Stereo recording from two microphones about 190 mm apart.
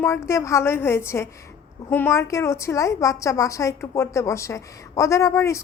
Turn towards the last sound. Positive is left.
turn(degrees=15)  # may be behind; listen again after turning